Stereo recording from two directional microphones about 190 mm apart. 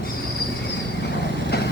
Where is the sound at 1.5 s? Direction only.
55° left (ahead or behind).